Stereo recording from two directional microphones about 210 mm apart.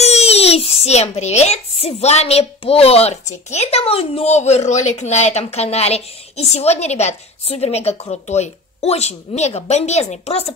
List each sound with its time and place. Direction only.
0.0 s a child's voice: 30° left (ahead or behind)